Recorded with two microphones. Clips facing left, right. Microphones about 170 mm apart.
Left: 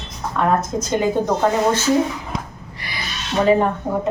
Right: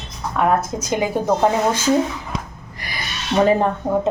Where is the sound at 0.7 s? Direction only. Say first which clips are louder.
Left 3 dB; 10° right (ahead or behind).